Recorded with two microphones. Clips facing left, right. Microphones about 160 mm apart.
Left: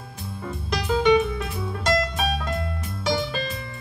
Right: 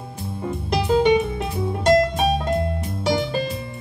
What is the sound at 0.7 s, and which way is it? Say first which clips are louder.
Music: right 2 dB; 30° right (ahead or behind).